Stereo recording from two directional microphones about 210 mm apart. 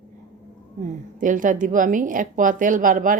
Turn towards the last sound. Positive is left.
turn(degrees=-40)  # may be behind; listen again after turning